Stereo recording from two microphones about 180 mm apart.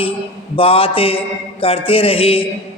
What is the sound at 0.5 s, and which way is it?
A man's voice, 30° left (ahead or behind).